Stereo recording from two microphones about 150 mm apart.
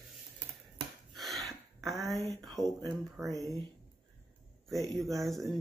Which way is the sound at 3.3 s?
20° left (ahead or behind).